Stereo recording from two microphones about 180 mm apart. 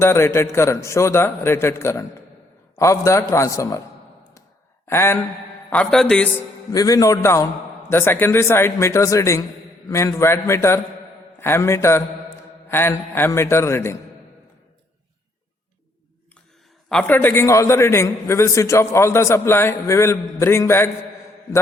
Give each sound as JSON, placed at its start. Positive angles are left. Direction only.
{"t": 0.0, "sound": "a man's voice", "side_deg": 15}
{"t": 4.9, "sound": "a man's voice", "side_deg": 15}
{"t": 6.7, "sound": "a man's voice", "side_deg": 20}
{"t": 16.9, "sound": "a man's voice", "side_deg": 10}